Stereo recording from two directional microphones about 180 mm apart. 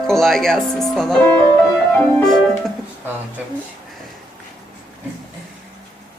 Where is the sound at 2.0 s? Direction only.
10° left (ahead or behind).